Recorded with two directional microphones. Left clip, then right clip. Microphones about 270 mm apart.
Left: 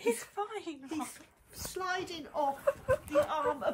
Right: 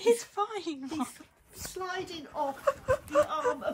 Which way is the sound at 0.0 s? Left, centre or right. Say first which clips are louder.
Right 7 dB; right.